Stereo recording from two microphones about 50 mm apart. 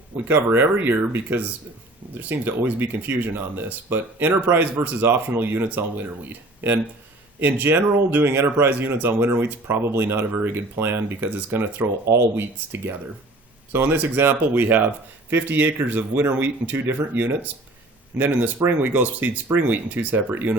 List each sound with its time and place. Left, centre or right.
0.4 s speech: right
13.7 s speech: right